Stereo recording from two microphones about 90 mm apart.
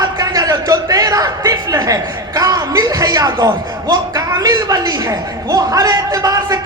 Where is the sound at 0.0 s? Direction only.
40° right (ahead or behind).